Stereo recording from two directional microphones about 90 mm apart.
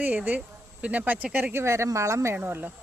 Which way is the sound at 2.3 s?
20° right (ahead or behind).